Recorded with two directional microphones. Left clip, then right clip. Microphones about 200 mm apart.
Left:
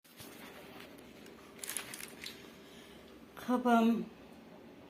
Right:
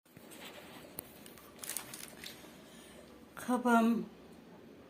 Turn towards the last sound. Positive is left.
turn(degrees=-5)  # may be behind; listen again after turning